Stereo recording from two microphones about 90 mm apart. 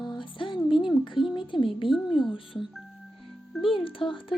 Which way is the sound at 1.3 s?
65° left (ahead or behind).